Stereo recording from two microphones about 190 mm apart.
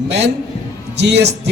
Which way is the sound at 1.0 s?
65° right (ahead or behind).